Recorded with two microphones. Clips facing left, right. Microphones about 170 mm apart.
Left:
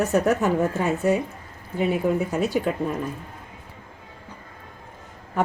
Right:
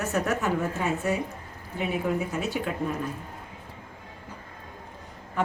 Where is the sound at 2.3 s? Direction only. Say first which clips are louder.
Left 6 dB; 40° left (ahead or behind).